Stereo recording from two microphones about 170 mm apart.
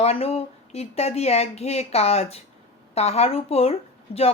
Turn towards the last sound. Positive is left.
turn(degrees=35)  # may be behind; listen again after turning